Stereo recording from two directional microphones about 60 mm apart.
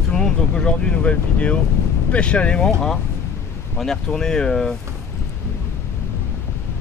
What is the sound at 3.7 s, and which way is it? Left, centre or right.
Speech, centre.